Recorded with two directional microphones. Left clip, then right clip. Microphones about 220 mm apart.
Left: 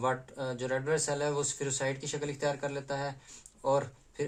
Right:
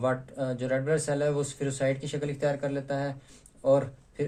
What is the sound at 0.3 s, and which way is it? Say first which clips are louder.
Speech: right 4 dB; 20° left (ahead or behind).